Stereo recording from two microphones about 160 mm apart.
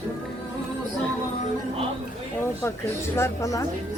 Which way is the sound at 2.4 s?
15° left (ahead or behind).